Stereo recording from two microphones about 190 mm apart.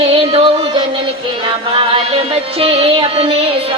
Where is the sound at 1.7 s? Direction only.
30° right (ahead or behind).